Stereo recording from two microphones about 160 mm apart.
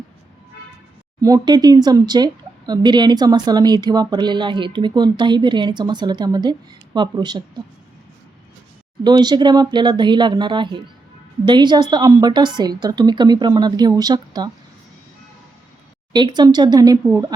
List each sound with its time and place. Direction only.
1.2 s speech: 25° right (ahead or behind)
9.0 s speech: 25° right (ahead or behind)
16.1 s speech: 25° right (ahead or behind)